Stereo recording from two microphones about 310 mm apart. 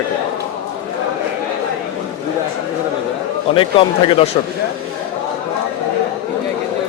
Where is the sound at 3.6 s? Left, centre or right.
Centre.